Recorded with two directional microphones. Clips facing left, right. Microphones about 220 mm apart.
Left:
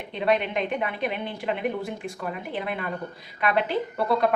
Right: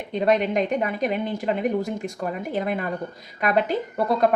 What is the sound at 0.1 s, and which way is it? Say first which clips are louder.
Speech: right 4 dB; 45° right (ahead or behind).